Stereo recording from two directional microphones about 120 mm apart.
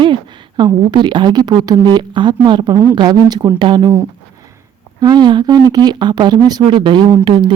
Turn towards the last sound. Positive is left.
turn(degrees=-40)  # may be behind; listen again after turning